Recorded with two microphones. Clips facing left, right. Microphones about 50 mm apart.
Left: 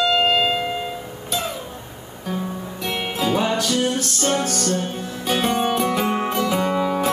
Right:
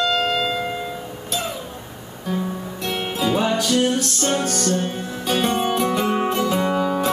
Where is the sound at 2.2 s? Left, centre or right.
Centre.